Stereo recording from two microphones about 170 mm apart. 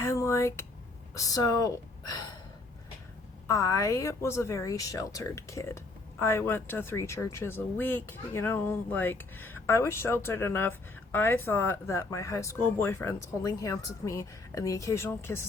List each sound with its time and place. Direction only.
0.0 s a sound: 15° left (ahead or behind)
1.1 s a woman's voice: 20° left (ahead or behind)
3.4 s a woman's voice: 20° left (ahead or behind)